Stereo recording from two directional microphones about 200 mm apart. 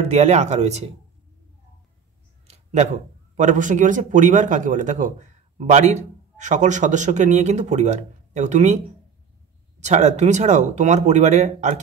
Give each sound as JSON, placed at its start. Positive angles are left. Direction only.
{"t": 0.0, "sound": "speech", "side_deg": -35}
{"t": 2.4, "sound": "a sound", "side_deg": -30}
{"t": 3.3, "sound": "speech", "side_deg": -40}